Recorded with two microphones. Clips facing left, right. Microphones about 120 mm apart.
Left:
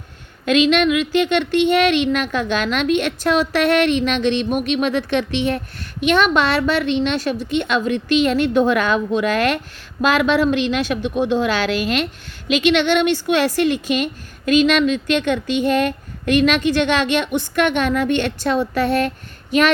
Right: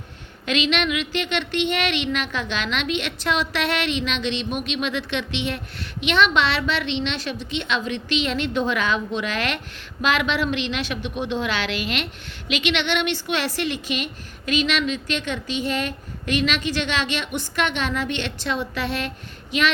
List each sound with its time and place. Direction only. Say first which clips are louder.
0.4 s a woman's voice: left 8 dB; 45° left (ahead or behind)